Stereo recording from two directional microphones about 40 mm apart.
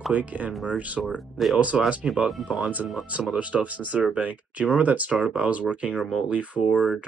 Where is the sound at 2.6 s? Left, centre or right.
Right.